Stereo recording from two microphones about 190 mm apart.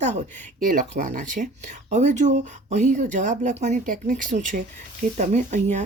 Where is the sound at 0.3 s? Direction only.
40° right (ahead or behind).